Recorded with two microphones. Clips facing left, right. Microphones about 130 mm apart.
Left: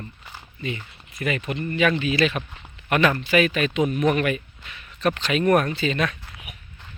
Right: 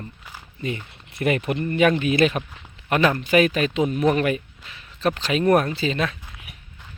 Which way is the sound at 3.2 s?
40° right (ahead or behind).